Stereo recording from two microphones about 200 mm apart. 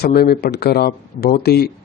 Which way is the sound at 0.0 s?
50° left (ahead or behind).